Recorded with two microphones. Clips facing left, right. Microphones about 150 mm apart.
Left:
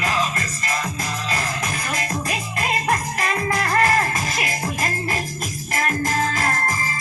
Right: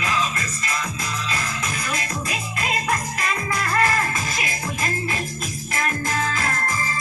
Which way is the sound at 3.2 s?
40° left (ahead or behind).